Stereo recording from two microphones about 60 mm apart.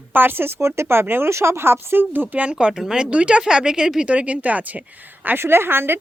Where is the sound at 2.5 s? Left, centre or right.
Centre.